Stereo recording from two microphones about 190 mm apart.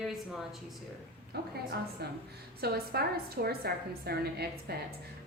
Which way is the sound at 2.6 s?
55° right (ahead or behind).